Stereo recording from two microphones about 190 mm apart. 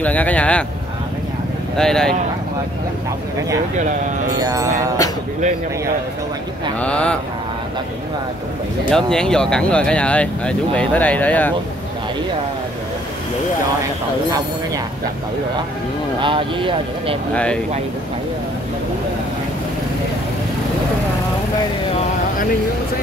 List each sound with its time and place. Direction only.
0.0 s speech: 10° left (ahead or behind)
1.8 s speech: 5° left (ahead or behind)
4.4 s music: 20° right (ahead or behind)
6.8 s speech: 5° left (ahead or behind)
8.9 s speech: 5° left (ahead or behind)
16.2 s speech: 25° right (ahead or behind)
17.3 s speech: 5° left (ahead or behind)